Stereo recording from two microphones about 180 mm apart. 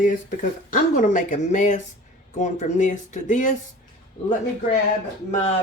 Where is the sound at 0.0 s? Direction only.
45° left (ahead or behind).